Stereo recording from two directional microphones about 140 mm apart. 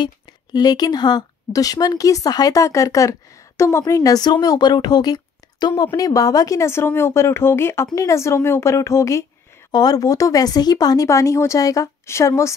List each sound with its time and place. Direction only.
0.0 s speech: 30° left (ahead or behind)